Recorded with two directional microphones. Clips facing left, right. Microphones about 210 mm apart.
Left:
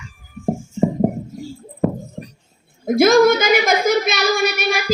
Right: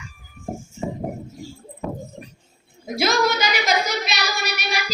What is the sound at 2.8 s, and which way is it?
Speech, 50° left (ahead or behind).